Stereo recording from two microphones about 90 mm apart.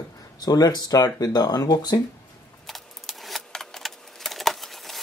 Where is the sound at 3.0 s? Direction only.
5° left (ahead or behind).